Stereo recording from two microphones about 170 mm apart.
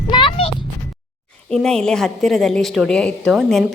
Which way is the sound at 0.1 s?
30° left (ahead or behind).